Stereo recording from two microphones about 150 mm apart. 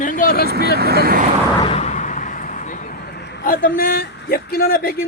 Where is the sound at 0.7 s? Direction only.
90° right.